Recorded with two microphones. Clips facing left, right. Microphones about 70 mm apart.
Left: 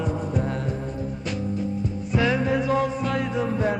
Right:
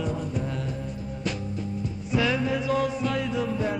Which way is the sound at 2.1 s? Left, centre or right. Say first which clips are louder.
Left 2 dB; left.